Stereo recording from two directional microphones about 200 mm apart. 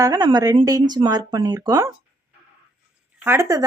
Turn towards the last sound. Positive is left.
turn(degrees=-15)  # may be behind; listen again after turning